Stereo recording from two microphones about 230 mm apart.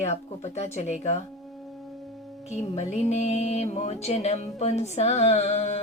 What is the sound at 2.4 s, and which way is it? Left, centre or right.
Music, left.